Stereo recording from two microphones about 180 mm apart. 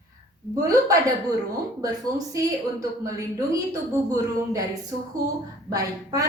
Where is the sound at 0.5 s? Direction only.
20° right (ahead or behind).